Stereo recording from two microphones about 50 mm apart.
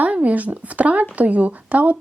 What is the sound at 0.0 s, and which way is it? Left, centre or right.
Speech, right.